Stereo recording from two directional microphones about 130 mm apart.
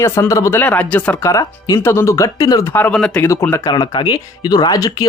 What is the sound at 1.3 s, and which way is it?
Speech, 25° left (ahead or behind).